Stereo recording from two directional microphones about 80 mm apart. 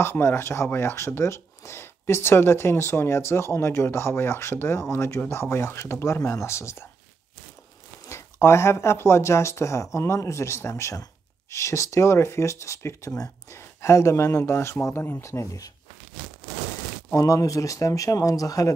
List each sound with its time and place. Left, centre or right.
0.0 s speech: left
8.1 s speech: left
17.1 s speech: left